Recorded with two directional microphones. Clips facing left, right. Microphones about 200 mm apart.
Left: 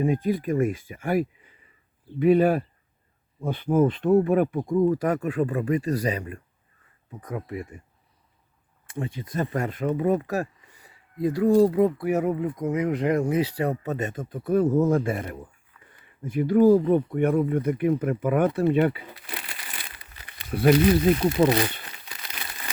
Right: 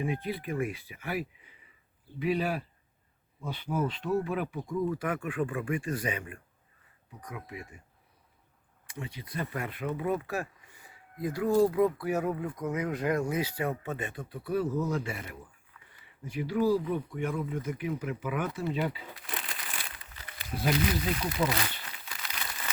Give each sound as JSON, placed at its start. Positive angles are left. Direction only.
{"t": 0.0, "sound": "speech", "side_deg": 45}
{"t": 7.1, "sound": "speech", "side_deg": 50}
{"t": 8.9, "sound": "speech", "side_deg": 50}
{"t": 19.2, "sound": "crumpling", "side_deg": 0}
{"t": 20.4, "sound": "speech", "side_deg": 60}
{"t": 21.5, "sound": "crumpling", "side_deg": 20}